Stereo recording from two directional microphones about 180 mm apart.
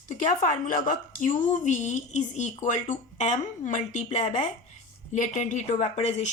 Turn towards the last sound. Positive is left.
turn(degrees=40)  # may be behind; listen again after turning